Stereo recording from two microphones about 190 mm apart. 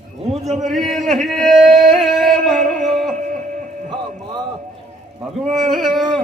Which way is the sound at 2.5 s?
40° right (ahead or behind).